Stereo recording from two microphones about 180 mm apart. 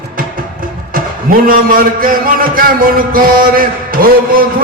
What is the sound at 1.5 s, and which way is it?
A man's voice, 50° right (ahead or behind).